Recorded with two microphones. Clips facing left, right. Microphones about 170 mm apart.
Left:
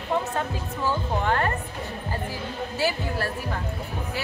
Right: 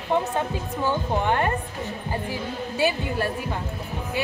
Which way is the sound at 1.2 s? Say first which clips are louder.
Right 1 dB; 20° right (ahead or behind).